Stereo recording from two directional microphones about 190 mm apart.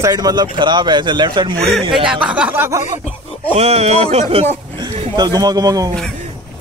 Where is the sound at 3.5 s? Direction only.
35° right (ahead or behind).